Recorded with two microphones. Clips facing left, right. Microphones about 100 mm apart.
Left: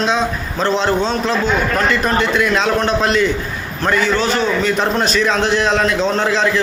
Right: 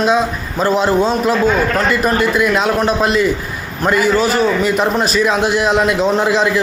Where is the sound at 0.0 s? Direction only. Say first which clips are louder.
Right 3 dB; 5° right (ahead or behind).